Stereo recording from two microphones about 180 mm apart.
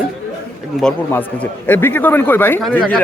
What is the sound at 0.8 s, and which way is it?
A man's voice, 10° left (ahead or behind).